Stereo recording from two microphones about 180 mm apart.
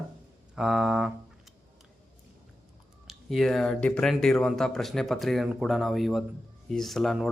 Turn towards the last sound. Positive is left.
turn(degrees=0)  # may be behind; listen again after turning